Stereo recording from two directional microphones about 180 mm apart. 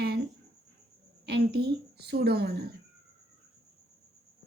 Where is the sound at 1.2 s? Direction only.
65° right (ahead or behind).